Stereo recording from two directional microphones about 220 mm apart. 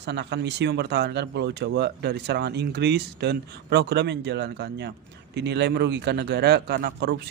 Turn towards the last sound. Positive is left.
turn(degrees=-50)  # may be behind; listen again after turning